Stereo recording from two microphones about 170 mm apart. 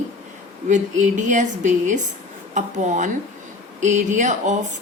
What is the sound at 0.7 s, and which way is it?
Speech, 45° right (ahead or behind).